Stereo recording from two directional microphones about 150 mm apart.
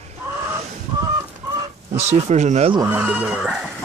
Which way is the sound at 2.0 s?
50° right (ahead or behind).